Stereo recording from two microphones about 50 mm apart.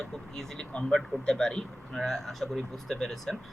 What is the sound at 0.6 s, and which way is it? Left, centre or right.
Speech, left.